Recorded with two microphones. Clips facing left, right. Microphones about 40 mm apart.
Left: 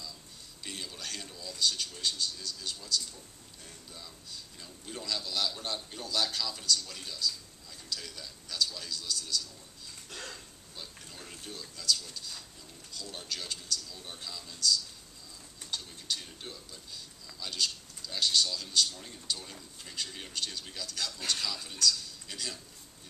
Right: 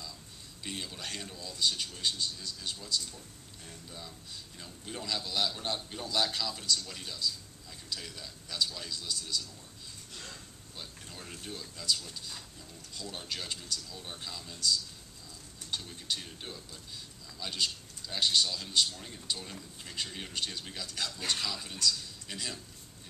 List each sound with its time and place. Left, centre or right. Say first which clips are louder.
0.7 s a man's voice: right 1 dB; centre
10.8 s a man's voice: right 1 dB; centre
15.7 s a man's voice: right 1 dB; centre